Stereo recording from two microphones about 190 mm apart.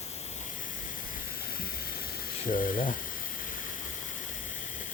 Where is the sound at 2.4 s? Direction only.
45° left (ahead or behind).